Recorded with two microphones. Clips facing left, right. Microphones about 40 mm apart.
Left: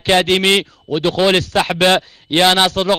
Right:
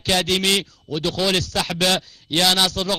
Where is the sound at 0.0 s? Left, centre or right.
Left.